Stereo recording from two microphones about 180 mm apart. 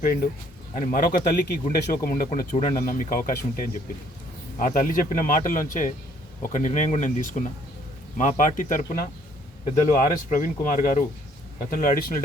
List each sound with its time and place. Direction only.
0.0 s speech: 50° left (ahead or behind)